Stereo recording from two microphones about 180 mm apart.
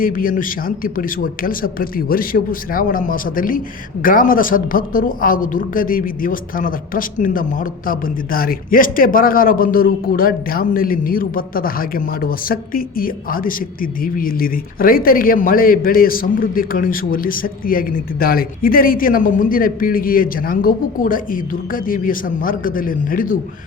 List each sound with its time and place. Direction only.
0.0 s speech: 50° left (ahead or behind)